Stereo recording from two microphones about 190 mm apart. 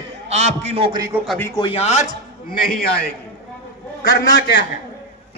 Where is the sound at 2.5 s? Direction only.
50° left (ahead or behind).